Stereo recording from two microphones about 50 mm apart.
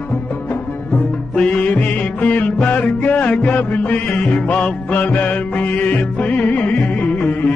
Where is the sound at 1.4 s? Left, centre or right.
Left.